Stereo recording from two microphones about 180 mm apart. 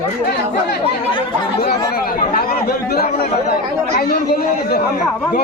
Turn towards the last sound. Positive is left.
turn(degrees=55)  # may be behind; listen again after turning